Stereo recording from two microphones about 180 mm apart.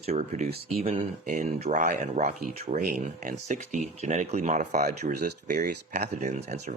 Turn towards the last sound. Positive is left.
turn(degrees=-40)  # may be behind; listen again after turning